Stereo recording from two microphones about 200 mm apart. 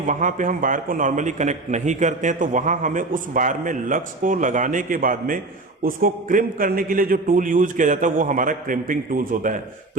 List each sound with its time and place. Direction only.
0.0 s a man's voice: 40° right (ahead or behind)